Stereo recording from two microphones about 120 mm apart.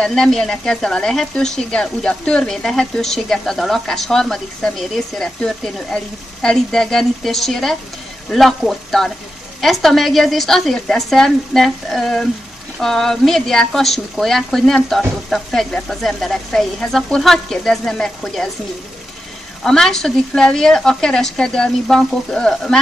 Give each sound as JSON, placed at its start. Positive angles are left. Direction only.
{"t": 0.0, "sound": "speech", "side_deg": 5}
{"t": 19.6, "sound": "speech", "side_deg": 5}